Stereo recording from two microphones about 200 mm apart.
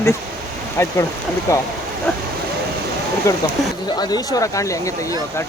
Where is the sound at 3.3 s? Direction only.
15° left (ahead or behind).